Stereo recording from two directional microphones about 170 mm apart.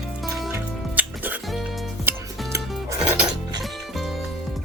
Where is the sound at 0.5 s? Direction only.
10° right (ahead or behind).